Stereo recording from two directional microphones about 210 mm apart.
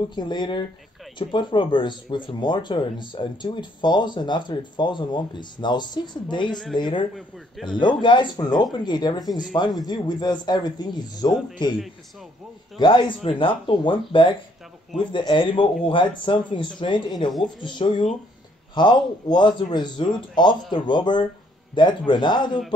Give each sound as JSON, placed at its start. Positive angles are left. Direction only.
{"t": 0.1, "sound": "speech", "side_deg": 20}
{"t": 7.2, "sound": "a man's voice", "side_deg": 0}
{"t": 7.8, "sound": "speech", "side_deg": 20}